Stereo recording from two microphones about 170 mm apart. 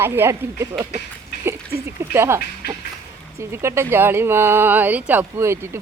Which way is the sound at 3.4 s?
15° right (ahead or behind).